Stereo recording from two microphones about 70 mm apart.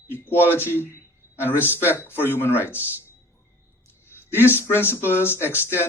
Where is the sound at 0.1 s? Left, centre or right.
Left.